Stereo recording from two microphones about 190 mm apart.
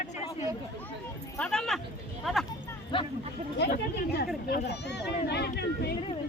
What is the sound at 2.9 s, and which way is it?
Speech, 25° left (ahead or behind).